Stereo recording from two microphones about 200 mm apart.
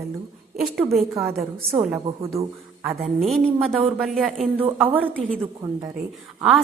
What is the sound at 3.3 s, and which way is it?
A woman's voice, centre (ahead or behind).